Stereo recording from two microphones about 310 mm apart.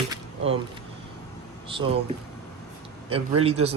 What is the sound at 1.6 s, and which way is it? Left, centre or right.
Speech, centre.